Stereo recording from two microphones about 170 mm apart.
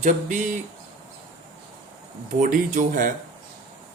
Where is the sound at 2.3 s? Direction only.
50° right (ahead or behind).